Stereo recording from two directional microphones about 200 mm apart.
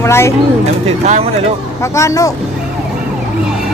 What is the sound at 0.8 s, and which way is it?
Speech, 35° right (ahead or behind).